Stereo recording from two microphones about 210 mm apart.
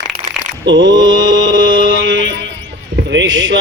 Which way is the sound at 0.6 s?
60° right (ahead or behind).